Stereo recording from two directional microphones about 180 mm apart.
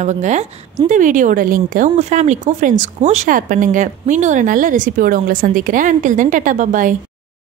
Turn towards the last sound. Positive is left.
turn(degrees=-45)  # may be behind; listen again after turning